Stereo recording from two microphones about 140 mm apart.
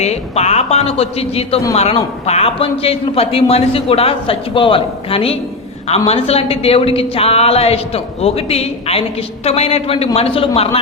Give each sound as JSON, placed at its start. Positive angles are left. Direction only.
{"t": 0.0, "sound": "speech", "side_deg": 50}